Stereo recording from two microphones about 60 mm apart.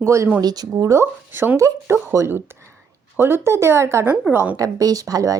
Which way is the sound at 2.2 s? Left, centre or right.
Right.